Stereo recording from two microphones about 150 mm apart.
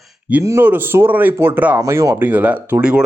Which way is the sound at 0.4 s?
15° right (ahead or behind).